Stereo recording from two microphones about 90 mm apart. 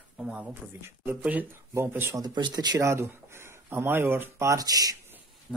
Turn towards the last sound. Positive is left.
turn(degrees=-20)  # may be behind; listen again after turning